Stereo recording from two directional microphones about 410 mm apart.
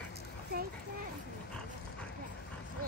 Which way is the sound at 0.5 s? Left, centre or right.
Right.